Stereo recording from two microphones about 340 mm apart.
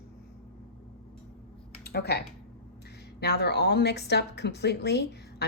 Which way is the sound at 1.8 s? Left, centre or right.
Left.